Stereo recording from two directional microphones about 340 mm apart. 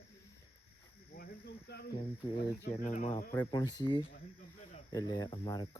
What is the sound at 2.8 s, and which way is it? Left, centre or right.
Speech, left.